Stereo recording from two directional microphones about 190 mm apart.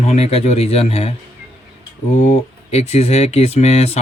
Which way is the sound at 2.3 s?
35° left (ahead or behind).